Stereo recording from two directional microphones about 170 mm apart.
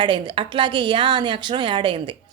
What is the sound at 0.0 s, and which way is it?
A woman's voice, 30° right (ahead or behind).